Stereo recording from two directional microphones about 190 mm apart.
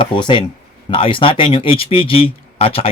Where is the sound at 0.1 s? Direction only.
25° left (ahead or behind).